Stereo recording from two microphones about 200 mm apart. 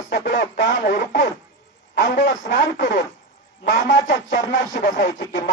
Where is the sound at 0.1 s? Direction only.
60° left (ahead or behind).